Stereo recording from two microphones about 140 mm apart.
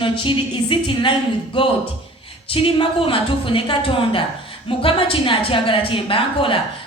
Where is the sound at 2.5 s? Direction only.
40° left (ahead or behind).